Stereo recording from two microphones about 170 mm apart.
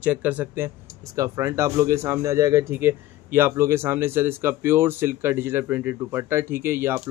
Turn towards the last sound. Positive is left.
turn(degrees=-15)  # may be behind; listen again after turning